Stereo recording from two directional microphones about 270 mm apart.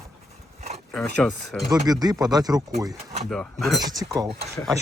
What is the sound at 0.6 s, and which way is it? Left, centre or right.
Dog, right.